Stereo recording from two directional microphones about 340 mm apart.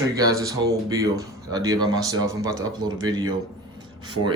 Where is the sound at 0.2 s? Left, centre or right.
Centre.